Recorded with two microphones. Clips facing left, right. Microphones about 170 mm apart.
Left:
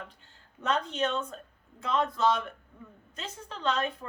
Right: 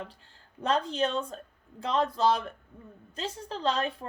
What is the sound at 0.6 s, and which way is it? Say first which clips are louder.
A woman's voice: right 2 dB; 35° right (ahead or behind).